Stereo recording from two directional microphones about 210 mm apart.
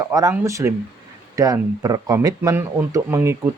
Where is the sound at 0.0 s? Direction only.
15° right (ahead or behind).